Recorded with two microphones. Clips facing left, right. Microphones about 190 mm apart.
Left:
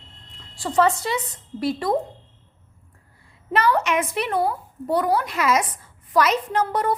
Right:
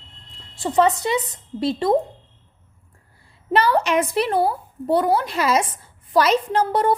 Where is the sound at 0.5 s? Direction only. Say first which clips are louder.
Right 2 dB; 20° right (ahead or behind).